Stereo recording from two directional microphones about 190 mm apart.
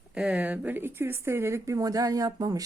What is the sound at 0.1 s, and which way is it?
Speech, 5° right (ahead or behind).